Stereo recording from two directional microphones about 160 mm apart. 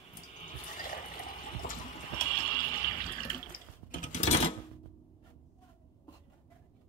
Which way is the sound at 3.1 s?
60° left (ahead or behind).